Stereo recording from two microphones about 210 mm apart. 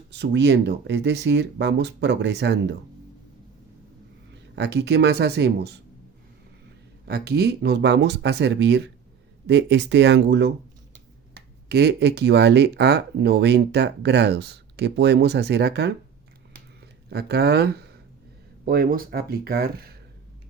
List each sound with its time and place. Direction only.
0.1 s speech: 55° right (ahead or behind)
4.5 s speech: 55° right (ahead or behind)
7.0 s speech: 50° right (ahead or behind)
16.5 s a sound: 50° right (ahead or behind)
18.6 s speech: 45° right (ahead or behind)